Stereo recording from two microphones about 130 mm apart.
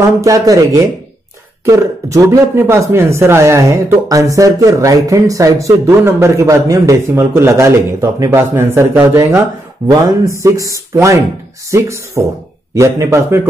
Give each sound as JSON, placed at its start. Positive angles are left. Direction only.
{"t": 0.2, "sound": "speech", "side_deg": -25}